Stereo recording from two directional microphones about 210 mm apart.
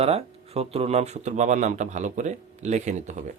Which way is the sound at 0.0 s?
30° right (ahead or behind).